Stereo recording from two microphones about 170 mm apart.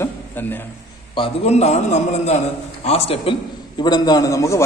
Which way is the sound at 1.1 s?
40° left (ahead or behind).